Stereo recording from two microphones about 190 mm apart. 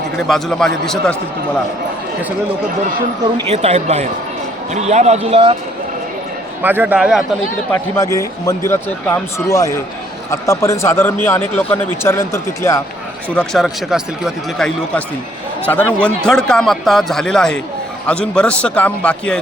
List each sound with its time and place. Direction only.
0.2 s speech: centre (ahead or behind)
3.3 s speech: 35° right (ahead or behind)
6.6 s a man's voice: 10° right (ahead or behind)
7.7 s speech: 15° left (ahead or behind)
13.3 s speech: 5° left (ahead or behind)